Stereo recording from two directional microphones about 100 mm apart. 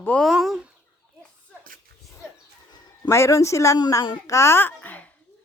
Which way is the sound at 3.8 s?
45° left (ahead or behind).